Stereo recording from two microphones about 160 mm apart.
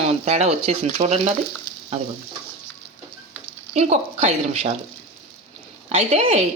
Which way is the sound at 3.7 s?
45° right (ahead or behind).